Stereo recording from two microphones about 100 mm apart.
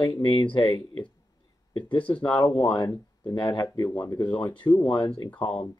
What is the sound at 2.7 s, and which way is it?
Speech, 40° left (ahead or behind).